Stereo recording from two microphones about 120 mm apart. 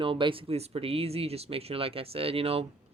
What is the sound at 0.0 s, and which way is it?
Speech, 45° right (ahead or behind).